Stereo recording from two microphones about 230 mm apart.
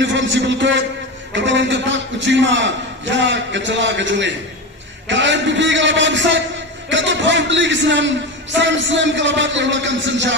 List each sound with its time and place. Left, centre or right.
0.0 s a man's voice: right